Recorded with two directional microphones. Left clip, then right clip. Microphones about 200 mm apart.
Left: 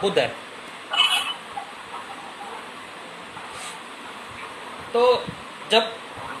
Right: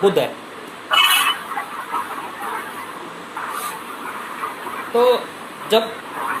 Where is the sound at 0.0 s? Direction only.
Centre (ahead or behind).